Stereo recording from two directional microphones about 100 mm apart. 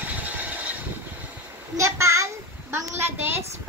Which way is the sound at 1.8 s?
30° right (ahead or behind).